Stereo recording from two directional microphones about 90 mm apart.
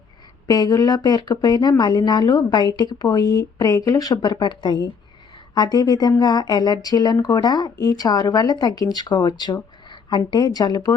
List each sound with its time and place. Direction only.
0.4 s a woman's voice: 45° left (ahead or behind)